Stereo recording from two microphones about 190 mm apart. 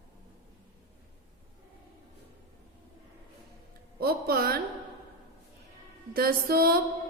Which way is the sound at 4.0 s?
55° right (ahead or behind).